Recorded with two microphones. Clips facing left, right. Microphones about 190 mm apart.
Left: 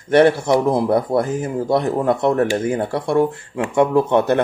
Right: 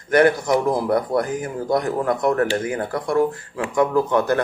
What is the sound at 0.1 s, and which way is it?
Speech, 30° left (ahead or behind).